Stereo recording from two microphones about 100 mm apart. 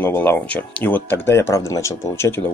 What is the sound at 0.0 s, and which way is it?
Speech, 20° left (ahead or behind).